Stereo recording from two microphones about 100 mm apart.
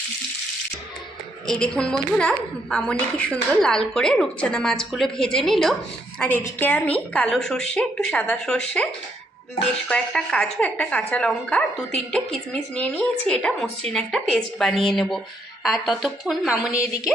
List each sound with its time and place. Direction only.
1.5 s a woman's voice: 10° left (ahead or behind)
6.1 s a woman's voice: 15° left (ahead or behind)
9.9 s a woman's voice: 5° left (ahead or behind)
16.7 s a woman's voice: 35° left (ahead or behind)